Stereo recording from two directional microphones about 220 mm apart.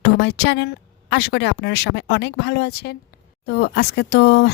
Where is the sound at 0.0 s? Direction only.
50° left (ahead or behind).